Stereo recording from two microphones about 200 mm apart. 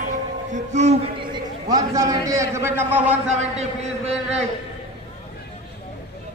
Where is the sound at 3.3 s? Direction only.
30° right (ahead or behind).